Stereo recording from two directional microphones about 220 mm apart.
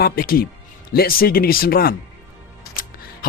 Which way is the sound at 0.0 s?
40° left (ahead or behind).